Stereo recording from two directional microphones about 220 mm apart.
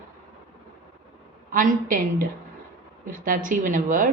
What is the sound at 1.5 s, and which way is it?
A woman's voice, 40° right (ahead or behind).